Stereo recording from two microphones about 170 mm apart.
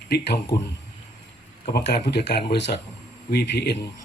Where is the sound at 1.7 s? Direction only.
75° left (ahead or behind).